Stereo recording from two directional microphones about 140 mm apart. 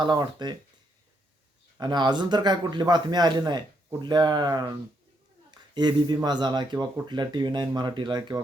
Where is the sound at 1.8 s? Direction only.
30° right (ahead or behind).